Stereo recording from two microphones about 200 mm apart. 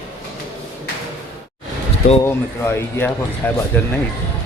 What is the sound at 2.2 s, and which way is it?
Speech, 10° left (ahead or behind).